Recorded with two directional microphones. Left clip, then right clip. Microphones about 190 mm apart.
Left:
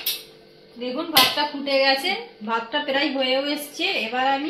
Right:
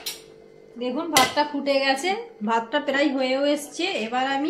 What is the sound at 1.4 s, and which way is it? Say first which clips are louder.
A woman's voice: left 1 dB; 55° right (ahead or behind).